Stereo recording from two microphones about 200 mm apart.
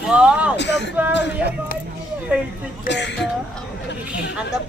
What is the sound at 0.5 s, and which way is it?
Speech, 60° left (ahead or behind).